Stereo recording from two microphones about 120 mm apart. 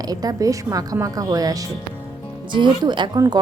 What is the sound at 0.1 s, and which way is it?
Speech, 30° right (ahead or behind).